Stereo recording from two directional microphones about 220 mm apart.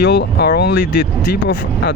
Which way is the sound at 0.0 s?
50° left (ahead or behind).